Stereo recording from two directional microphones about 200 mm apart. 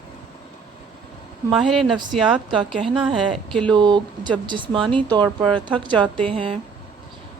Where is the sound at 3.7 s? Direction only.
20° right (ahead or behind).